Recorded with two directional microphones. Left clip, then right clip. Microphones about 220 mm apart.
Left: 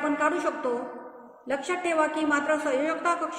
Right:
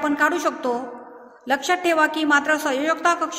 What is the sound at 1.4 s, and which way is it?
A man's voice, 50° right (ahead or behind).